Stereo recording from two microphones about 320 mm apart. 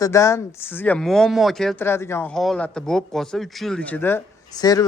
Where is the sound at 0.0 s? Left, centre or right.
Centre.